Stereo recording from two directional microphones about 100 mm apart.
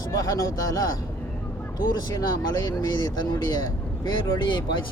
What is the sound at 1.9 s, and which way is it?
Speech, 40° left (ahead or behind).